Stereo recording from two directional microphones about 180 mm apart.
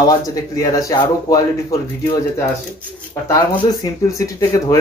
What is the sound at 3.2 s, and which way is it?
Speech, 20° left (ahead or behind).